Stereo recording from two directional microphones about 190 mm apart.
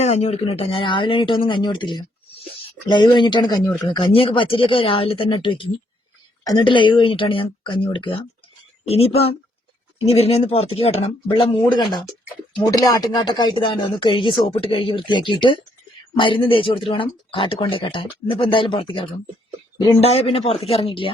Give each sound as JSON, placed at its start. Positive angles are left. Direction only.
{"t": 0.0, "sound": "speech", "side_deg": 35}
{"t": 20.0, "sound": "speech", "side_deg": 30}